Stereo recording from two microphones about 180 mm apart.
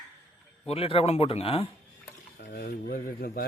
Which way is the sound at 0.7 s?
30° left (ahead or behind).